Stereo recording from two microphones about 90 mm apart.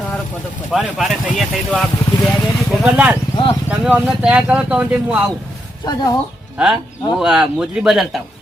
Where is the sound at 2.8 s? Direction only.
15° right (ahead or behind).